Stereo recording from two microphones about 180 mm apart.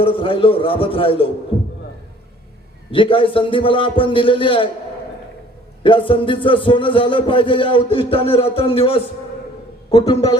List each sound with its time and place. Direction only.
0.0 s speech: 30° left (ahead or behind)
2.9 s speech: 30° left (ahead or behind)
5.8 s a man's voice: 30° left (ahead or behind)